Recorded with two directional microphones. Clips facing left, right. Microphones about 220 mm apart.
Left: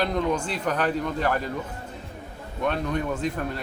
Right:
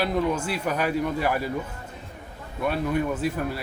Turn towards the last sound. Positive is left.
turn(degrees=-5)  # may be behind; listen again after turning